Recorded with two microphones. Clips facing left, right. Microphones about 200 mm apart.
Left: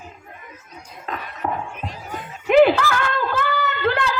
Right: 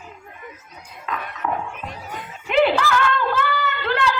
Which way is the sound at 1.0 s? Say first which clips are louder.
Right 1 dB; 35° left (ahead or behind).